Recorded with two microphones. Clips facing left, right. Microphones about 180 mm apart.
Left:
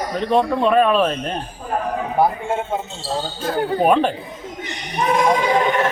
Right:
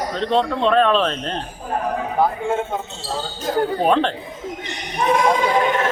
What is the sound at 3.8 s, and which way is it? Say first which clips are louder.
Speech: left 4 dB; 10° left (ahead or behind).